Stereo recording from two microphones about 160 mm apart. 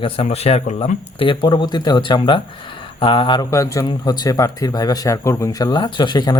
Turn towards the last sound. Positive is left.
turn(degrees=25)  # may be behind; listen again after turning